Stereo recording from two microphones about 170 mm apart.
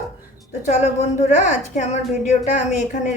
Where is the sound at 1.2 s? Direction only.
45° left (ahead or behind).